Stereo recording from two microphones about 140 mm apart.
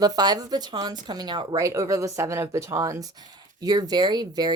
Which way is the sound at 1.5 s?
25° right (ahead or behind).